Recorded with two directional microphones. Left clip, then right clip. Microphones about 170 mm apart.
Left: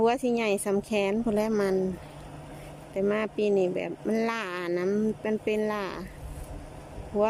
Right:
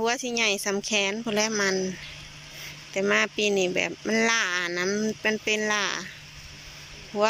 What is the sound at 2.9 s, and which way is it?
Speech, 15° left (ahead or behind).